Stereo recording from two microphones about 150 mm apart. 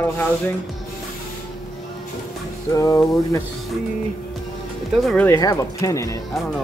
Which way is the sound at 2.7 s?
20° left (ahead or behind).